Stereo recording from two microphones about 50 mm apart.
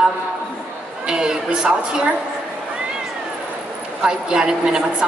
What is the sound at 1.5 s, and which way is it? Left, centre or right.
Speech, centre.